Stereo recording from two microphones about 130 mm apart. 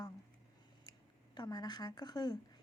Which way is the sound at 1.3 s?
35° left (ahead or behind).